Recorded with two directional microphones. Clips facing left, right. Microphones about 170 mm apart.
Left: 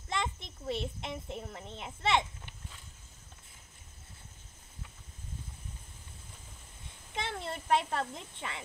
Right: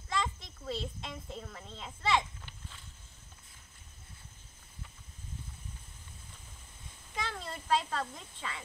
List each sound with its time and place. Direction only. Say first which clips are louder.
0.1 s a child's voice: even; 25° left (ahead or behind)
7.2 s a child's voice: left 2 dB; 25° left (ahead or behind)